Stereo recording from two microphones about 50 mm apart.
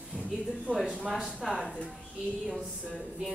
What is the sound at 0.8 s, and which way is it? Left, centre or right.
Speech, right.